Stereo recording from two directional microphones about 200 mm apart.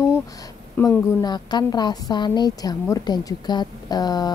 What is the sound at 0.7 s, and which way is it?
A woman's voice, 15° left (ahead or behind).